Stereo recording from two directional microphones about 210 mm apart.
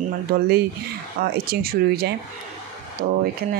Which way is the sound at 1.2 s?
45° right (ahead or behind).